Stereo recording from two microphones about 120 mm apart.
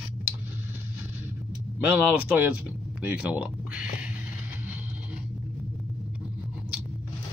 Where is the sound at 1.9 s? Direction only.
15° right (ahead or behind).